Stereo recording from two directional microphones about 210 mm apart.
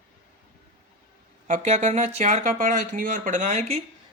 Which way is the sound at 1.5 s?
35° right (ahead or behind).